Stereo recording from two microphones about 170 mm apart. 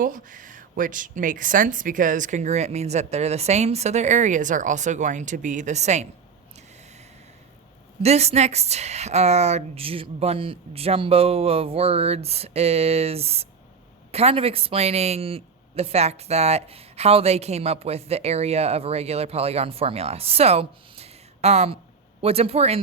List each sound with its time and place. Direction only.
0.0 s speech: 50° right (ahead or behind)
8.0 s speech: 40° right (ahead or behind)